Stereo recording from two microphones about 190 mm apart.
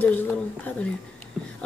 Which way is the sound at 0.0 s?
10° left (ahead or behind).